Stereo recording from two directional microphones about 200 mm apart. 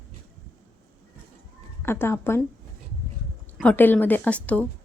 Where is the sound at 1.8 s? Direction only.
10° left (ahead or behind).